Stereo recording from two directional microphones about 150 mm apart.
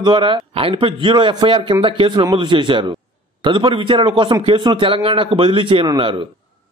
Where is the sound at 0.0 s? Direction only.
35° right (ahead or behind).